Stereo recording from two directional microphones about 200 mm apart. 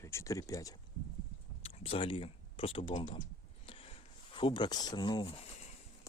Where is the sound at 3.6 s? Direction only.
25° left (ahead or behind).